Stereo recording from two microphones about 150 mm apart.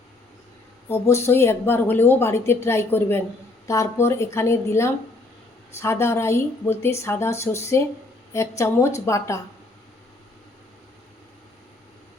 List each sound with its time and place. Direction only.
0.9 s a woman's voice: 20° left (ahead or behind)